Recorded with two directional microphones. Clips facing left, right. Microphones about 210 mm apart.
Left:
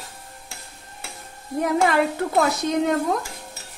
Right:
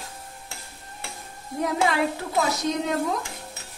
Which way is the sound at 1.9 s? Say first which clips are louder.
Left 4 dB; 55° left (ahead or behind).